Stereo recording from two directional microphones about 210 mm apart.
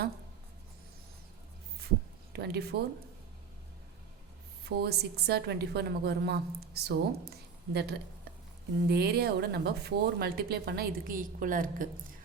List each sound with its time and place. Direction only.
2.3 s a woman's voice: 50° right (ahead or behind)
4.8 s a woman's voice: 50° right (ahead or behind)